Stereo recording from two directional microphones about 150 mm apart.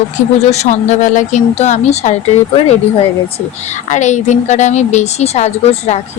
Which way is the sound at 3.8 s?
55° left (ahead or behind).